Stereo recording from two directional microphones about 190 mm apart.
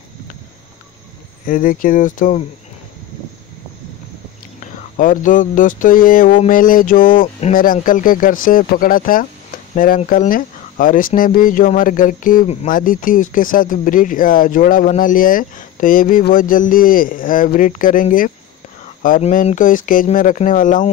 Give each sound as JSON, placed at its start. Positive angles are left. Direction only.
{"t": 1.5, "sound": "speech", "side_deg": 45}
{"t": 4.9, "sound": "speech", "side_deg": 45}